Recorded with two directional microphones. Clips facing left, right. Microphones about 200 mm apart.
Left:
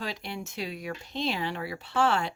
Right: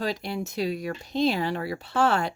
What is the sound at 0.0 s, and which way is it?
Speech, 40° right (ahead or behind).